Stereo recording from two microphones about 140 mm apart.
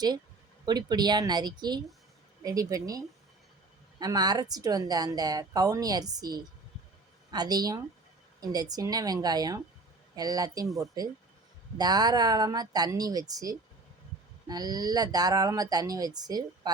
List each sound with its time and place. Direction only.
0.6 s a woman's voice: 30° right (ahead or behind)
4.0 s a woman's voice: 30° right (ahead or behind)